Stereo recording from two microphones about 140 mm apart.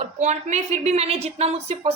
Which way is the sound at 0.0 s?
50° right (ahead or behind).